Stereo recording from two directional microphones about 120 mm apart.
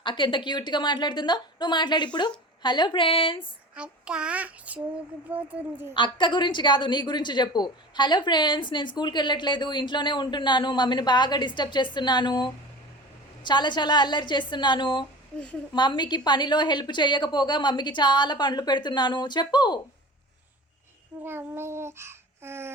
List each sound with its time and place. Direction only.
0.0 s a woman's voice: 40° left (ahead or behind)
3.8 s child singing: 10° right (ahead or behind)
5.9 s a woman's voice: 40° left (ahead or behind)
21.2 s child singing: 20° right (ahead or behind)